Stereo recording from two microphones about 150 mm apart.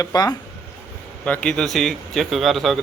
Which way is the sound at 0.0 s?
25° left (ahead or behind).